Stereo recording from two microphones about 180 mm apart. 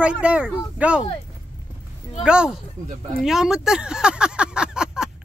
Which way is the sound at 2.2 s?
5° right (ahead or behind).